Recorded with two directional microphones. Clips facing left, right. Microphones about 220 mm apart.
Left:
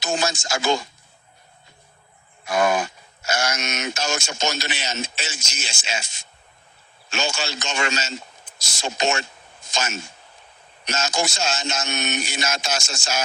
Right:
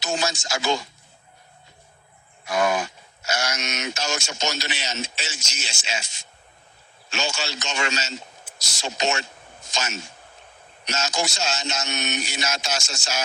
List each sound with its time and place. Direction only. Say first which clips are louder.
0.0 s speech: left 2 dB; 50° left (ahead or behind)
2.5 s speech: left 2 dB; 50° left (ahead or behind)